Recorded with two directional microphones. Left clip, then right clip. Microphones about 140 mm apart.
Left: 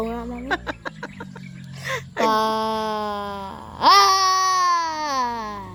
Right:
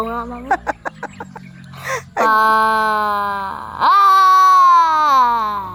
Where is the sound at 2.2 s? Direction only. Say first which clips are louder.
Right 8 dB; 10° left (ahead or behind).